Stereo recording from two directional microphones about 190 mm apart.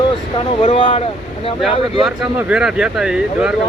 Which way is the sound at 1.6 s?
5° right (ahead or behind).